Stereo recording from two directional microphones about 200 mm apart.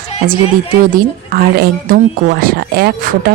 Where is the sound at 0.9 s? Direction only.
50° right (ahead or behind).